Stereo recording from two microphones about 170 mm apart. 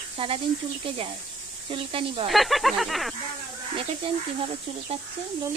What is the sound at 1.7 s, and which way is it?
Speech, 30° right (ahead or behind).